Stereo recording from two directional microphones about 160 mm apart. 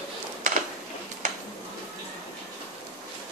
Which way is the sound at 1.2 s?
55° right (ahead or behind).